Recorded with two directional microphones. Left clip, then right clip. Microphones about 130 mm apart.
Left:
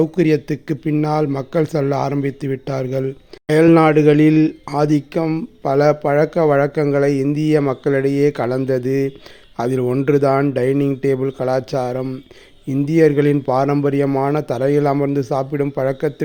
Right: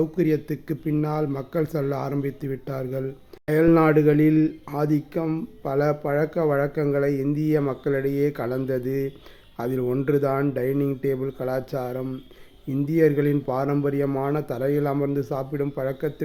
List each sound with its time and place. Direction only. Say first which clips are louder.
0.0 s speech: left 7 dB; 40° left (ahead or behind)